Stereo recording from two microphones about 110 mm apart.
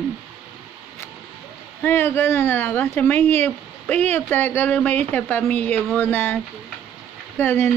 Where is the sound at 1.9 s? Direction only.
20° left (ahead or behind).